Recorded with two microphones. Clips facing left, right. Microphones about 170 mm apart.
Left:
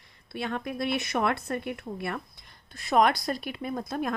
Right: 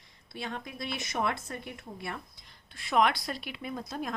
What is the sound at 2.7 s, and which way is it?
A woman's voice, 40° left (ahead or behind).